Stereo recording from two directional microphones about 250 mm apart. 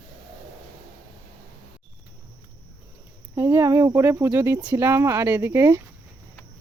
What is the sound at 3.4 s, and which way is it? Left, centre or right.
Speech, centre.